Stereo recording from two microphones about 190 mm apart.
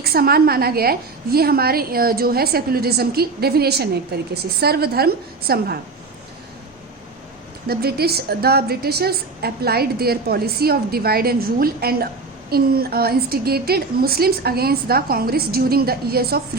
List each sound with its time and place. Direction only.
0.0 s a woman's voice: 55° right (ahead or behind)
7.7 s a woman's voice: 55° right (ahead or behind)